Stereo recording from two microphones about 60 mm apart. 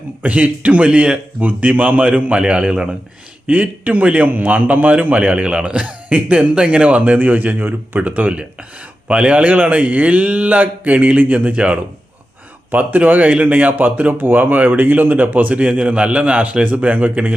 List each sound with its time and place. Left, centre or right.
0.2 s a man's voice: right
1.4 s a man's voice: right
3.4 s a man's voice: right